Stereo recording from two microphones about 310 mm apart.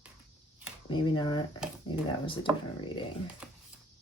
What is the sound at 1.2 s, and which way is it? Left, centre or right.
Speech, centre.